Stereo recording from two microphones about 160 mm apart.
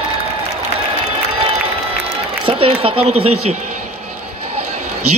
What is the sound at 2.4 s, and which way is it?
A woman's voice, 35° right (ahead or behind).